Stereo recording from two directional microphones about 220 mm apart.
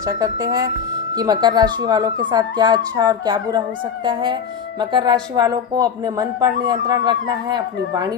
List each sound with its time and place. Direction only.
0.0 s speech: 15° right (ahead or behind)